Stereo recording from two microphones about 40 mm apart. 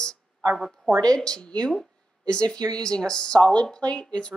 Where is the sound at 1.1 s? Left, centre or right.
Left.